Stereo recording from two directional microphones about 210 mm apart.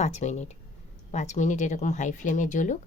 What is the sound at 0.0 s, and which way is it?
Speech, 30° left (ahead or behind).